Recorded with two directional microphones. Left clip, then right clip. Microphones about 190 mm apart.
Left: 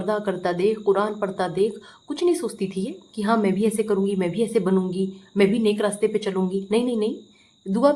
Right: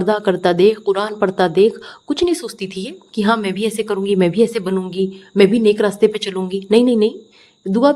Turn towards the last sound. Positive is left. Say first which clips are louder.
# right 5 dB
turn(degrees=-30)  # may be behind; listen again after turning